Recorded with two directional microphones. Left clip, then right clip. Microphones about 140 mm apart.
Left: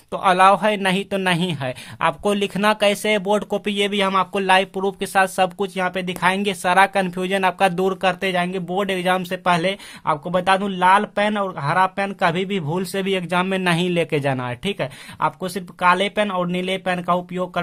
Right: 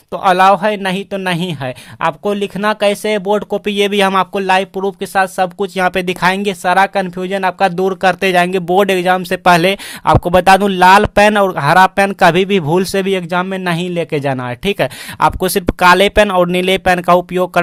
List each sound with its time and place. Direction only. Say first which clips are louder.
0.1 s speech: right 5 dB; 30° right (ahead or behind)
4.4 s speech: right 4 dB; 30° right (ahead or behind)
5.7 s speech: right 9 dB; 40° right (ahead or behind)
8.0 s speech: right 12 dB; 45° right (ahead or behind)
9.4 s speech: right 9 dB; 50° right (ahead or behind); by 13.4 s 30° right (ahead or behind)
13.4 s speech: right 2 dB; 20° right (ahead or behind); by 17.6 s 50° right (ahead or behind)